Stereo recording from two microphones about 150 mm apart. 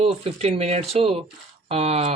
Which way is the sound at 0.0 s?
40° right (ahead or behind).